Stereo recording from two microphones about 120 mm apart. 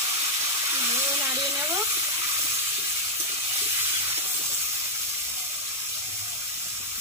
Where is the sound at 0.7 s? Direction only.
20° right (ahead or behind).